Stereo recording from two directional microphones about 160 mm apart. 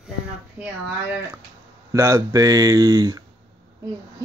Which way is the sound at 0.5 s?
10° right (ahead or behind).